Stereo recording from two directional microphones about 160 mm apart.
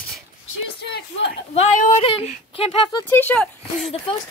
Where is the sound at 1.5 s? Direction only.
45° left (ahead or behind).